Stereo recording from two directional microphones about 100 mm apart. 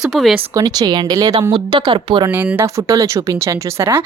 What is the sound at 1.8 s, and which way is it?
Speech, 65° right (ahead or behind).